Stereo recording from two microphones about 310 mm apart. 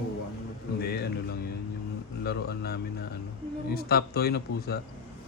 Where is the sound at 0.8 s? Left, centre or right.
Left.